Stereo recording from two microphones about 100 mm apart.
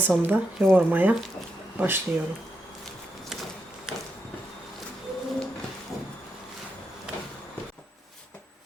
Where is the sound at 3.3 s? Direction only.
5° right (ahead or behind).